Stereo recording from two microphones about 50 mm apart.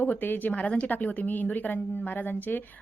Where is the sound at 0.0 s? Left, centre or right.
Left.